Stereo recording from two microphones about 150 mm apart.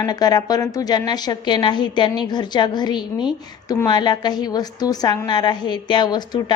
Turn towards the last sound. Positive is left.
turn(degrees=30)  # may be behind; listen again after turning